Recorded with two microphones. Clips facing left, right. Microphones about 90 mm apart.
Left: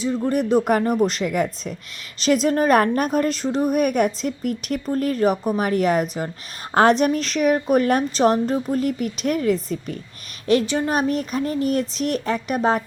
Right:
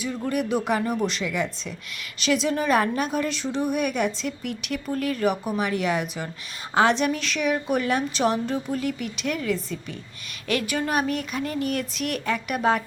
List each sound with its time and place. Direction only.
0.3 s speech: 35° left (ahead or behind)
0.6 s a woman's voice: 45° left (ahead or behind)